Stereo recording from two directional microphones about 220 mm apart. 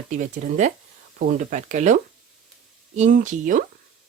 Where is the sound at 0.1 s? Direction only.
35° right (ahead or behind).